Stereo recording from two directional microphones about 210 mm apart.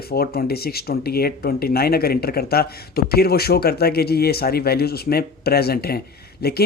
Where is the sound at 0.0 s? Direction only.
45° left (ahead or behind).